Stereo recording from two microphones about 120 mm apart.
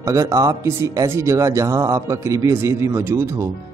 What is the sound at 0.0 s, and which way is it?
Speech, 25° right (ahead or behind).